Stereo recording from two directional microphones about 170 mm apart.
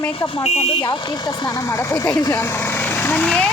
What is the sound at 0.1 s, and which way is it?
Speech, 30° left (ahead or behind).